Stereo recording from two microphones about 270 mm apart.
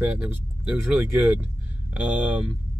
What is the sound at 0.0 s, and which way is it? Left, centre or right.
Speech, centre.